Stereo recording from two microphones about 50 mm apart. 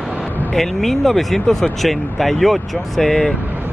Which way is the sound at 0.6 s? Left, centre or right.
Centre.